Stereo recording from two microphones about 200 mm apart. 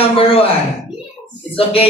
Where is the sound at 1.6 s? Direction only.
30° left (ahead or behind).